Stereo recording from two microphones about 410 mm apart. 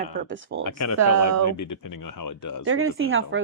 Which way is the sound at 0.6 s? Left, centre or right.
Left.